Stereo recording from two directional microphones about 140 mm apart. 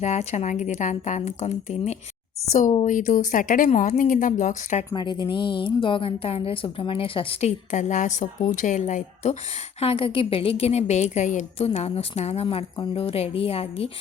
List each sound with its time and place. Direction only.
0.0 s a woman's voice: 55° left (ahead or behind)
2.8 s speech: 70° left (ahead or behind)
4.9 s a woman's voice: 30° left (ahead or behind)
7.7 s a woman's voice: 60° left (ahead or behind)
9.8 s a woman's voice: 40° left (ahead or behind)